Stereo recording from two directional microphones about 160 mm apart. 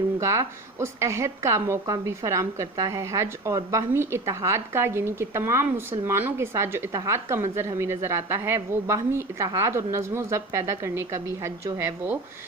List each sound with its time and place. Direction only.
0.2 s speech: 20° right (ahead or behind)